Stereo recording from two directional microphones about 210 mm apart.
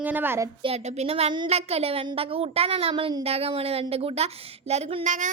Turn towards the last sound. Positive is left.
turn(degrees=-30)  # may be behind; listen again after turning